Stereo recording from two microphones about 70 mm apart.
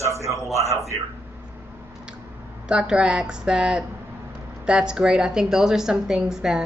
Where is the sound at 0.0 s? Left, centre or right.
Right.